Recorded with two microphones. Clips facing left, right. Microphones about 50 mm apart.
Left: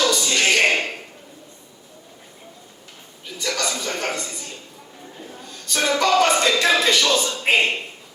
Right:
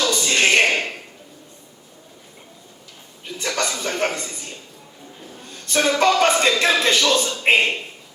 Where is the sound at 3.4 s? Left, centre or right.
Right.